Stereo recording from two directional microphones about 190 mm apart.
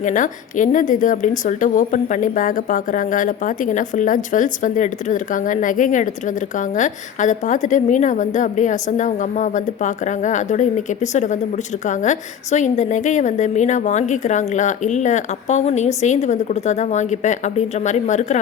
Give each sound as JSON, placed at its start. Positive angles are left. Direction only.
{"t": 0.0, "sound": "a woman's voice", "side_deg": 40}